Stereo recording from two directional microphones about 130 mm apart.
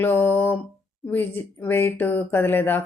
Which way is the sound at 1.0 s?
15° left (ahead or behind).